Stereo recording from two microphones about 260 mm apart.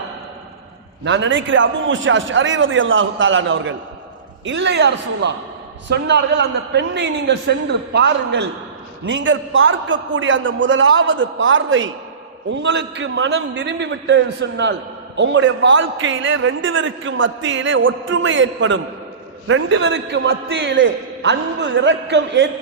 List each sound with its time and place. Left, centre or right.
1.0 s a man's voice: right